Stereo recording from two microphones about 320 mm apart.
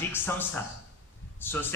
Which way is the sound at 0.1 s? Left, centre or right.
Centre.